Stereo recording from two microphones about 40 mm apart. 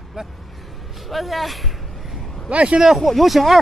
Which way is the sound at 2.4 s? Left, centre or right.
Right.